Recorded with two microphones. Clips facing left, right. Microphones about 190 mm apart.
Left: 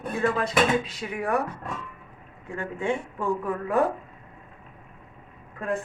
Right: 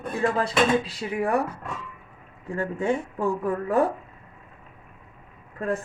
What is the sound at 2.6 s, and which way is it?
Speech, 40° right (ahead or behind).